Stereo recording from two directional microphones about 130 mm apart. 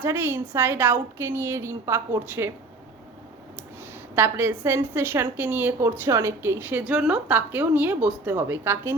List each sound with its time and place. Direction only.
0.0 s a woman's voice: 15° right (ahead or behind)
4.1 s a woman's voice: 15° right (ahead or behind)